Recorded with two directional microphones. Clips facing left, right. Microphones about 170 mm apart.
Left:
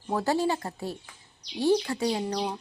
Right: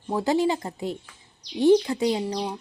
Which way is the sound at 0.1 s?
15° right (ahead or behind).